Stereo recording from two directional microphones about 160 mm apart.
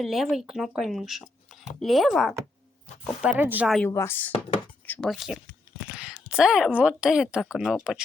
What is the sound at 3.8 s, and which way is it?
Speech, 15° left (ahead or behind).